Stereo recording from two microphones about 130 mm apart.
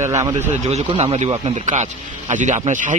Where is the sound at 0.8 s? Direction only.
50° right (ahead or behind).